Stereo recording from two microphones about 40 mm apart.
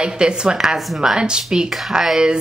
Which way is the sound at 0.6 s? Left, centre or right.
Centre.